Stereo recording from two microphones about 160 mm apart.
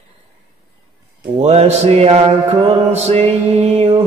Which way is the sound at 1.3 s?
40° right (ahead or behind).